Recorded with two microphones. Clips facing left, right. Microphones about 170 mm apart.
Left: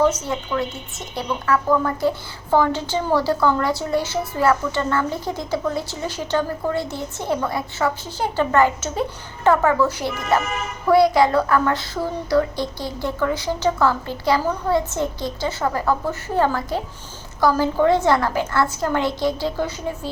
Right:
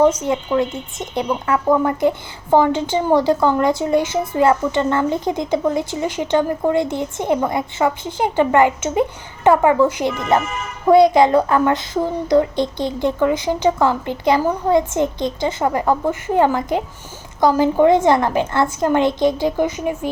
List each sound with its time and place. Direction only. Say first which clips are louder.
0.3 s a child's voice: right 6 dB; 20° right (ahead or behind)